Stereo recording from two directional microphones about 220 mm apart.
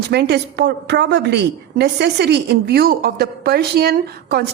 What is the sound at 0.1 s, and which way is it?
A woman's voice, 50° right (ahead or behind).